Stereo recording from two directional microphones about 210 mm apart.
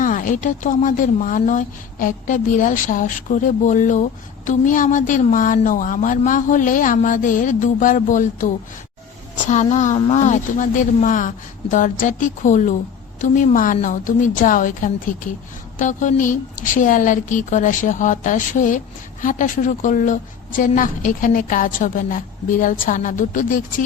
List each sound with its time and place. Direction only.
0.0 s a woman's voice: 40° left (ahead or behind)
9.5 s a woman's voice: 35° left (ahead or behind)